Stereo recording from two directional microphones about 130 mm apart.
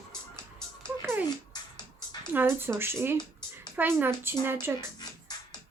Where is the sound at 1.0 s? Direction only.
20° right (ahead or behind).